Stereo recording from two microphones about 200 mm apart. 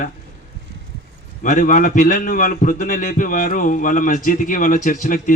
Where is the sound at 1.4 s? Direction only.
40° left (ahead or behind).